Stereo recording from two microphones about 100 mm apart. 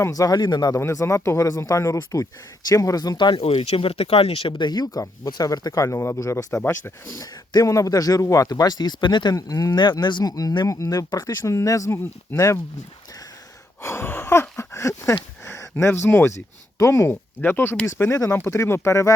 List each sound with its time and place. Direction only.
0.0 s speech: 35° left (ahead or behind)
0.8 s speech: 30° left (ahead or behind); by 3.3 s 45° left (ahead or behind)
3.3 s speech: 70° left (ahead or behind); by 7.2 s 25° left (ahead or behind)
7.2 s speech: 35° left (ahead or behind); by 9.3 s 50° left (ahead or behind)
9.3 s speech: 35° left (ahead or behind)
10.0 s speech: 50° left (ahead or behind); by 11.9 s 35° left (ahead or behind)
13.8 s speech: 25° left (ahead or behind)
14.6 s a sound: 30° left (ahead or behind)
15.4 s speech: 25° left (ahead or behind)